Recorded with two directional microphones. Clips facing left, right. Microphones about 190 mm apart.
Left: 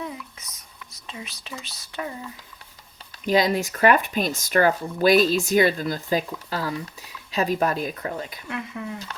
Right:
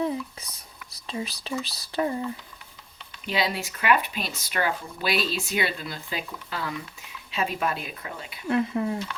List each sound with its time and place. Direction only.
0.0 s speech: 30° right (ahead or behind)
3.2 s speech: 45° left (ahead or behind)
8.4 s speech: 35° right (ahead or behind)